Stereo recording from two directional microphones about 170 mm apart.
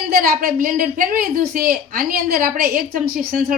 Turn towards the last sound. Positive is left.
turn(degrees=-60)  # may be behind; listen again after turning